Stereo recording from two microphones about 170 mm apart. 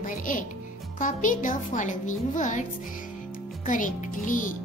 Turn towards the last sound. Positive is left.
turn(degrees=50)  # may be behind; listen again after turning